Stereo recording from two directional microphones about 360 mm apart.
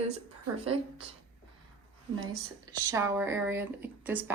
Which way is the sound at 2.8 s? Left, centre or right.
Centre.